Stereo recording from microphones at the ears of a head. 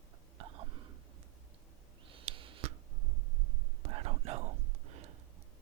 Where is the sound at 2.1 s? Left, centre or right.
Right.